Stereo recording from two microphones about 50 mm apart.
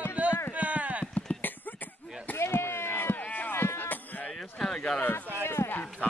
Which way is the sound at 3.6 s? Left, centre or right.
Left.